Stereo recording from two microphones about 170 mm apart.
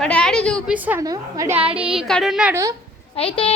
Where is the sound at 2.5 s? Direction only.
20° right (ahead or behind).